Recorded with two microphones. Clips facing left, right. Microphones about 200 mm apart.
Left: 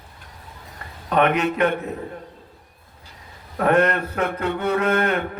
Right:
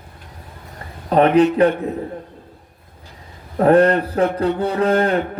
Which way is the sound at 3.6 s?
30° right (ahead or behind).